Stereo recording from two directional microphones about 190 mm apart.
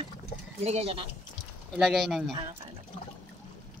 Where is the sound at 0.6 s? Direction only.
35° right (ahead or behind).